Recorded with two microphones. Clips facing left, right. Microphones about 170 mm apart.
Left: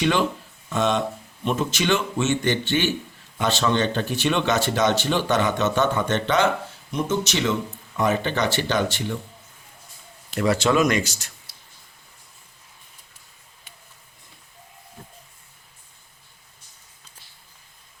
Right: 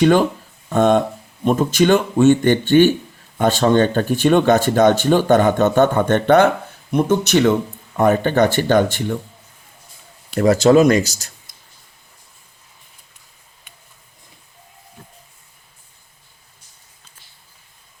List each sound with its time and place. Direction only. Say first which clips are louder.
0.0 s speech: right 8 dB; 45° right (ahead or behind)
10.3 s speech: right 8 dB; 45° right (ahead or behind)